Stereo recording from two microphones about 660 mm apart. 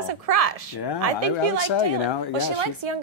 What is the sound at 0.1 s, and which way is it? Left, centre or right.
Speech, right.